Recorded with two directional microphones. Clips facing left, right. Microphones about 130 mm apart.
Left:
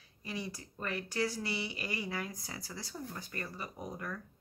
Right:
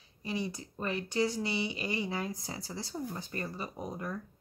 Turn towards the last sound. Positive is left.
turn(degrees=-20)  # may be behind; listen again after turning